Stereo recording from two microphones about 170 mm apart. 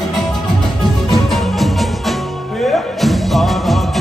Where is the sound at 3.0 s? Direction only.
Centre (ahead or behind).